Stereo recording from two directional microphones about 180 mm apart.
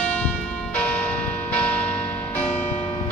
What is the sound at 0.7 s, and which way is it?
Music, 5° left (ahead or behind).